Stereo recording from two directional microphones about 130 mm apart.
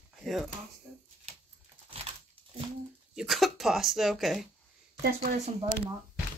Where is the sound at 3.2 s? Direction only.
Centre (ahead or behind).